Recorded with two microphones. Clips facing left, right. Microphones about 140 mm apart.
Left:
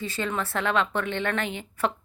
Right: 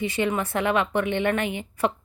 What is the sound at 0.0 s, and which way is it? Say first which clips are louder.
A woman's voice: right 5 dB; 15° right (ahead or behind).